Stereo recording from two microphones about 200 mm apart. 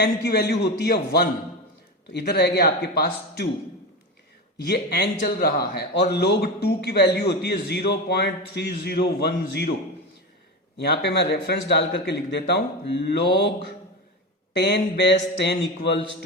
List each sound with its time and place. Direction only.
0.0 s a man's voice: 50° left (ahead or behind)
4.5 s a man's voice: 55° left (ahead or behind)
10.8 s a man's voice: 60° left (ahead or behind)